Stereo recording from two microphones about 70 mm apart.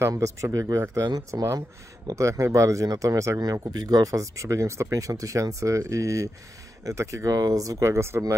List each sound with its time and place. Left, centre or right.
0.1 s speech: right
1.3 s speech: right